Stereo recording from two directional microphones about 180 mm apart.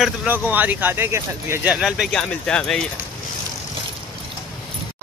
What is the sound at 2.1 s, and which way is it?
Speech, 5° left (ahead or behind).